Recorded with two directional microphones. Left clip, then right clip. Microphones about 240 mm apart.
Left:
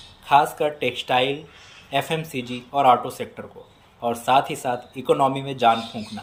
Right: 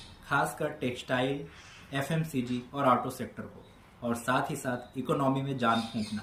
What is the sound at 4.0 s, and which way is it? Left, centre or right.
Speech, centre.